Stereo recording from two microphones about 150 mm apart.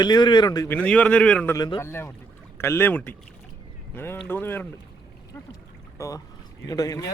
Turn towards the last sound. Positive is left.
turn(degrees=25)  # may be behind; listen again after turning